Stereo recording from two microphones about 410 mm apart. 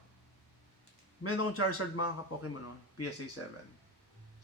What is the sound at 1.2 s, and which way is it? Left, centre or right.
A man's voice, left.